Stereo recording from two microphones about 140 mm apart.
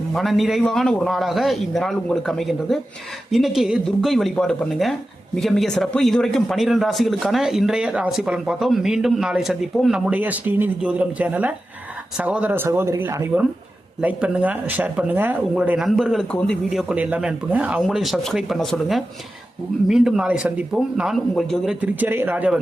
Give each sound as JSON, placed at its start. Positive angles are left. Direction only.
{"t": 0.1, "sound": "speech", "side_deg": 0}
{"t": 21.8, "sound": "speech", "side_deg": -15}